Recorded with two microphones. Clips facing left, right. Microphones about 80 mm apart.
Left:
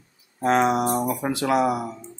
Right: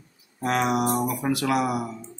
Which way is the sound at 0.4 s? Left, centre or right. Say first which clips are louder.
Left 4 dB; left.